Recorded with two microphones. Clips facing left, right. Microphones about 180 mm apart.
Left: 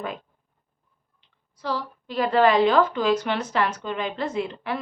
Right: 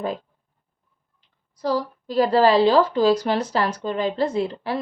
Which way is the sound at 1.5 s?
40° right (ahead or behind).